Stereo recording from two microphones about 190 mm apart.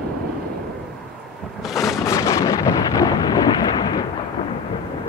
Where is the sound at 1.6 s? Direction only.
Centre (ahead or behind).